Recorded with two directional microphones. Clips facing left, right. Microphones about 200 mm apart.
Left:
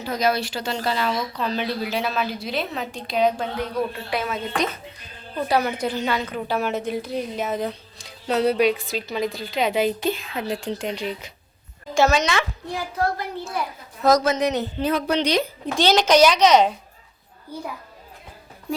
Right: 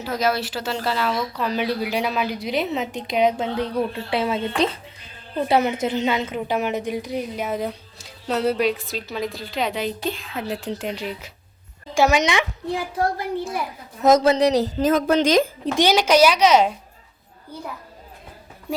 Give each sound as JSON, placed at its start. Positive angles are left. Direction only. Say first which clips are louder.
{"t": 0.0, "sound": "a woman's voice", "louder": "even", "side_deg": -5}
{"t": 14.0, "sound": "a woman's voice", "louder": "right 3 dB", "side_deg": -25}
{"t": 15.8, "sound": "a woman's voice", "louder": "even", "side_deg": -10}